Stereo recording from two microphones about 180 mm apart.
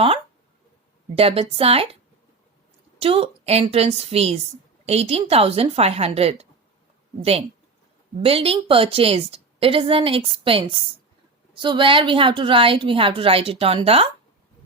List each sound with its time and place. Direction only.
1.1 s a woman's voice: 35° right (ahead or behind)
3.0 s a woman's voice: 30° right (ahead or behind)